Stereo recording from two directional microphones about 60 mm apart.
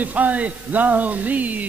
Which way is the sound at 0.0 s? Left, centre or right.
Right.